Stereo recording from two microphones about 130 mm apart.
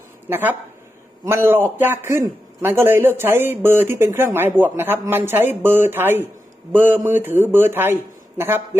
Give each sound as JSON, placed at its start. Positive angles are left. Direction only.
{"t": 0.3, "sound": "a man's voice", "side_deg": -15}